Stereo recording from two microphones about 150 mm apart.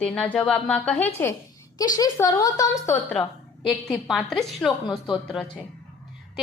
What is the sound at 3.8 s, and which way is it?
A woman's voice, centre (ahead or behind).